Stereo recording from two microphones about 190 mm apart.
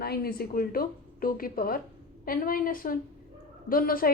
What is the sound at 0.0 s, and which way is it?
A woman's voice, 55° left (ahead or behind).